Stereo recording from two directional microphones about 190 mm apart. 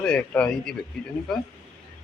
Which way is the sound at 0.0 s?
5° left (ahead or behind).